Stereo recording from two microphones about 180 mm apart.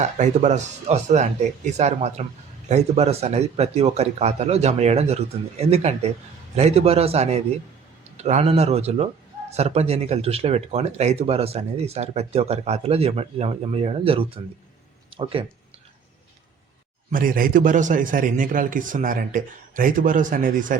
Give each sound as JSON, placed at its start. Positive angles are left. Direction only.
{"t": 0.0, "sound": "speech", "side_deg": -40}
{"t": 17.1, "sound": "a man's voice", "side_deg": -50}